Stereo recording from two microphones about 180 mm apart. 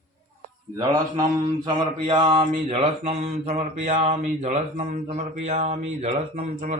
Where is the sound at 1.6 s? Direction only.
30° right (ahead or behind).